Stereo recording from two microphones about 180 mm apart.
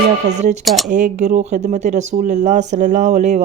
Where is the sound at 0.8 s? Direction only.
45° right (ahead or behind).